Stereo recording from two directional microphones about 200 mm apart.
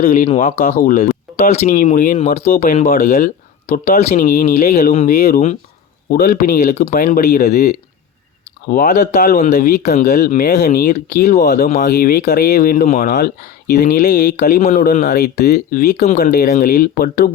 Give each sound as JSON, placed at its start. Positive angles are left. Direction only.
{"t": 0.0, "sound": "speech", "side_deg": 40}